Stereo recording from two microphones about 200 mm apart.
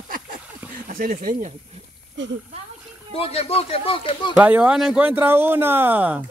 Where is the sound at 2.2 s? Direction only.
65° right (ahead or behind).